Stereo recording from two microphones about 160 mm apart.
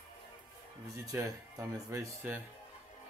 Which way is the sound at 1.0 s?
20° right (ahead or behind).